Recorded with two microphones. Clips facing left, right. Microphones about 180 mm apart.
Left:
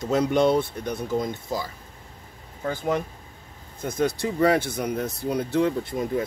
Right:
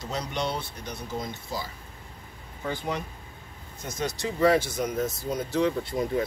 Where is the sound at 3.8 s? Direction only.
55° left (ahead or behind).